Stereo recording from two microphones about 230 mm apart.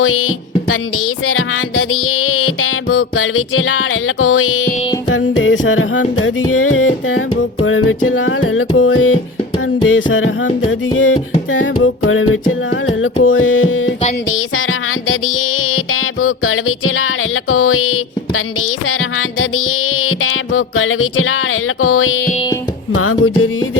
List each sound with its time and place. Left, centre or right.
0.0 s music: left